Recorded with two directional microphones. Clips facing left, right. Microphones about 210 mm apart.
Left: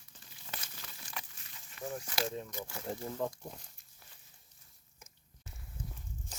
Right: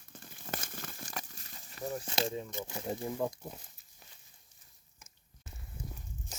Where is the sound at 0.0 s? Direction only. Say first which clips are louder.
Right 8 dB; 50° right (ahead or behind).